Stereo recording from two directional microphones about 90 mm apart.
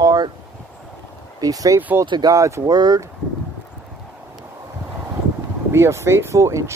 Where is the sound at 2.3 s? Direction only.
40° right (ahead or behind).